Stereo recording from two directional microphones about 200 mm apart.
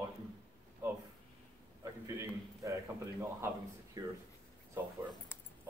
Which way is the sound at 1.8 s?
15° right (ahead or behind).